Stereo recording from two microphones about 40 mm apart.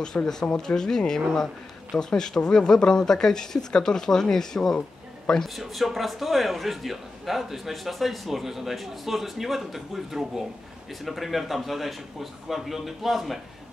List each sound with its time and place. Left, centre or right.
0.3 s speech: centre
5.6 s a man's voice: centre